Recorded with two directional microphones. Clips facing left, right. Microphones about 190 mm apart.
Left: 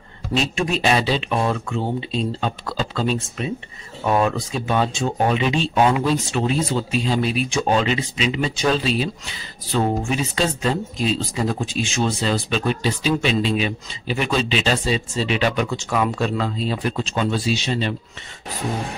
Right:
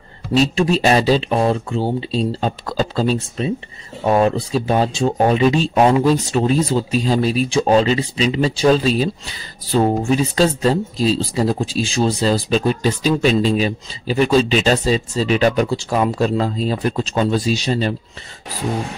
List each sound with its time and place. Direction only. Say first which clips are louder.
0.4 s speech: right 7 dB; 35° right (ahead or behind)